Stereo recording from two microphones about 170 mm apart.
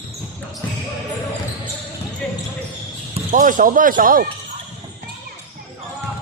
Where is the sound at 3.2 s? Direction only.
50° right (ahead or behind).